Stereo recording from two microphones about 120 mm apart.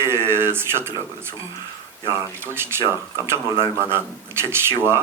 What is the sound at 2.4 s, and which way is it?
Speech, 20° right (ahead or behind).